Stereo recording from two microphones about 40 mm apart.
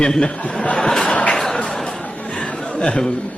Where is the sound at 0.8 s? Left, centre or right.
Centre.